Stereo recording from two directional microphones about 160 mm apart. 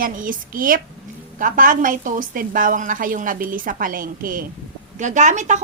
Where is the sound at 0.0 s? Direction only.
60° right (ahead or behind).